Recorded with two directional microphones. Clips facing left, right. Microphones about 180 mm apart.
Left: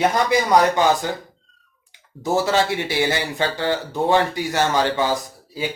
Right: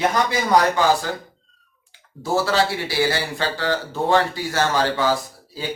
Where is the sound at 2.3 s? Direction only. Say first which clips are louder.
Left 1 dB; 20° left (ahead or behind).